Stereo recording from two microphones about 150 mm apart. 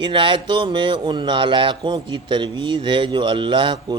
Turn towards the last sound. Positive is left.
turn(degrees=-30)  # may be behind; listen again after turning